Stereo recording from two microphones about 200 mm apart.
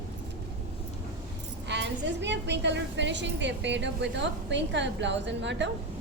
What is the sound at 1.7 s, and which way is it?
A woman's voice, 60° right (ahead or behind).